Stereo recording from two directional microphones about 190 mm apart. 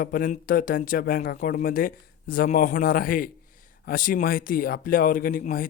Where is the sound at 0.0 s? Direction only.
45° left (ahead or behind).